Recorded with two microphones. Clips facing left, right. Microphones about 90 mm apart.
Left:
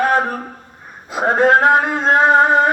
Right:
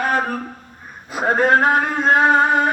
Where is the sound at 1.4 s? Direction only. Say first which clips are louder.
Left 3 dB; 90° left.